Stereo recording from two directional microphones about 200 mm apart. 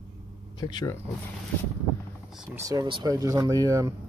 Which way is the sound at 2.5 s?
15° right (ahead or behind).